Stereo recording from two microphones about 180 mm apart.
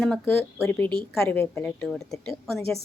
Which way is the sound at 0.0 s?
5° left (ahead or behind).